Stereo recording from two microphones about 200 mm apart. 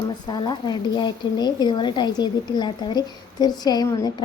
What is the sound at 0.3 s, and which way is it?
A woman's voice, 20° left (ahead or behind).